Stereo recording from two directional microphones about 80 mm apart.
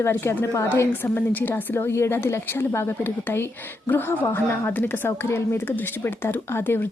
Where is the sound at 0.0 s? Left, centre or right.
Left.